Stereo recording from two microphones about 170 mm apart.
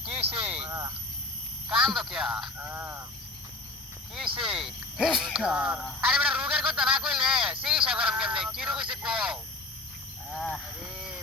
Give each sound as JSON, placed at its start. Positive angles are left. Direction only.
{"t": 0.4, "sound": "speech", "side_deg": -5}
{"t": 0.7, "sound": "speech", "side_deg": -20}
{"t": 1.7, "sound": "speech", "side_deg": 0}
{"t": 2.6, "sound": "speech", "side_deg": -15}
{"t": 4.4, "sound": "speech", "side_deg": 0}